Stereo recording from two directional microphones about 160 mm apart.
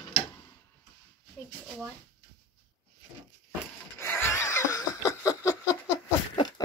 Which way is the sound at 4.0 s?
15° left (ahead or behind).